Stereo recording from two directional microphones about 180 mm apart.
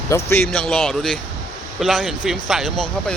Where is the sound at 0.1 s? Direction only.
15° left (ahead or behind).